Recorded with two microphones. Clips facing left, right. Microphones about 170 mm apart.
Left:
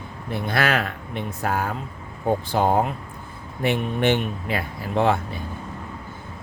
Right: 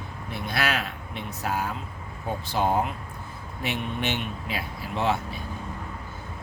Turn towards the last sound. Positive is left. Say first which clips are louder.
# left 5 dB
turn(degrees=55)  # may be behind; listen again after turning